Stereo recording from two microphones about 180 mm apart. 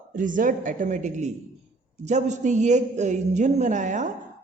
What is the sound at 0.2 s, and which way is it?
A woman's voice, 45° right (ahead or behind).